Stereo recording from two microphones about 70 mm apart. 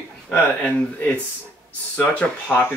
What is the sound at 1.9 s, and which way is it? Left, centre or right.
Speech, left.